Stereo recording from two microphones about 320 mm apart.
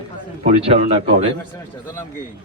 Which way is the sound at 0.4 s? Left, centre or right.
Centre.